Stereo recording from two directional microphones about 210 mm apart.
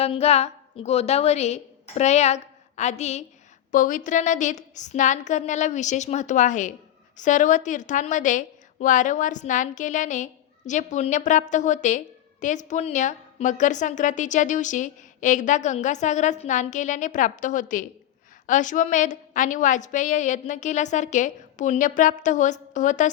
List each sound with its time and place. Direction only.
0.0 s a woman's voice: 30° left (ahead or behind)